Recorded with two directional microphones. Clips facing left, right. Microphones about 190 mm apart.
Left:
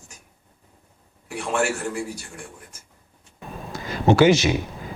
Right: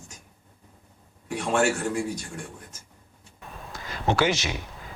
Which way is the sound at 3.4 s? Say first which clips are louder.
Left 7 dB; 25° left (ahead or behind).